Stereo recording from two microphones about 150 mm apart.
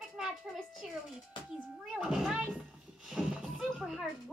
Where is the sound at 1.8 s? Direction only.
5° right (ahead or behind).